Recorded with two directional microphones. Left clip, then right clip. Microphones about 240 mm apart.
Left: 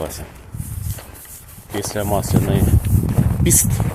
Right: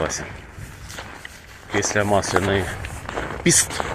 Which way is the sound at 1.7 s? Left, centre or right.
Centre.